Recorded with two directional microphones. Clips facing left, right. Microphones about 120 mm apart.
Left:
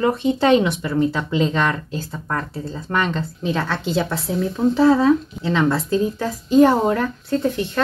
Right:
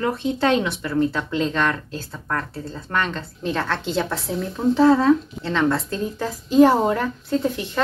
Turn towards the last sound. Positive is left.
turn(degrees=-5)  # may be behind; listen again after turning